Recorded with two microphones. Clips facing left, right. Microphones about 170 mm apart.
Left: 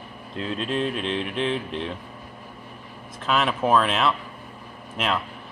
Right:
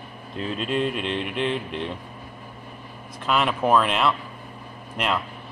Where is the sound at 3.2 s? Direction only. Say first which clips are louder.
Even; centre (ahead or behind).